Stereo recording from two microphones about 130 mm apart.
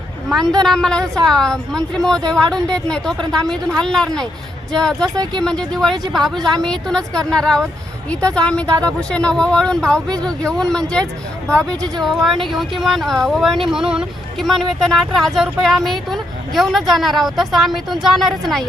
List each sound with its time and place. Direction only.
0.3 s speech: 5° left (ahead or behind)
1.0 s a woman's voice: 25° right (ahead or behind)
1.3 s speech: 5° left (ahead or behind)
5.1 s speech: 30° right (ahead or behind)
5.4 s speech: 5° left (ahead or behind)